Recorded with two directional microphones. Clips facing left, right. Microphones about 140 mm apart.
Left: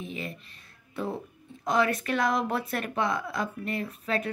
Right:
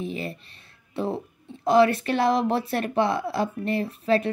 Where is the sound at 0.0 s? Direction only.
35° right (ahead or behind).